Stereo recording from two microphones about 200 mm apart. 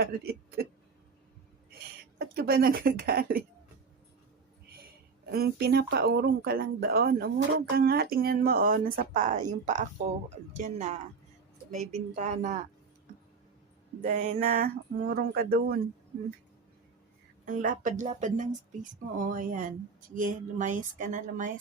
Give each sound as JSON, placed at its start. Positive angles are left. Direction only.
{"t": 0.0, "sound": "speech", "side_deg": -50}
{"t": 2.1, "sound": "speech", "side_deg": -50}
{"t": 5.3, "sound": "speech", "side_deg": -50}
{"t": 14.0, "sound": "speech", "side_deg": -40}
{"t": 17.4, "sound": "speech", "side_deg": -45}